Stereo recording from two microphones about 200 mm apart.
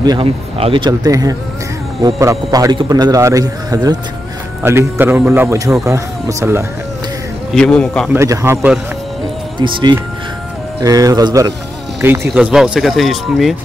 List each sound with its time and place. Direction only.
0.0 s a man's voice: 25° right (ahead or behind)
7.5 s speech: 5° left (ahead or behind)
8.1 s a man's voice: 15° right (ahead or behind)